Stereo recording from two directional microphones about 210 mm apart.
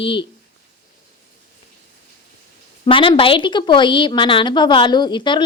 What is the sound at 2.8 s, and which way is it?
A woman's voice, 25° left (ahead or behind).